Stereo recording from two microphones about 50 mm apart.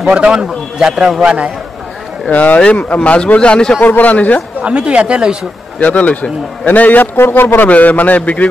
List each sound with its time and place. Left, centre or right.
0.1 s a man's voice: centre
2.2 s a man's voice: left
3.8 s a man's voice: left
4.6 s speech: right
5.8 s a man's voice: left
7.2 s a man's voice: left
7.6 s a man's voice: left